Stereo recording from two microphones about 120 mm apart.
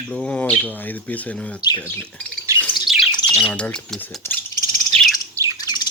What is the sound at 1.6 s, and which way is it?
Speech, 35° left (ahead or behind).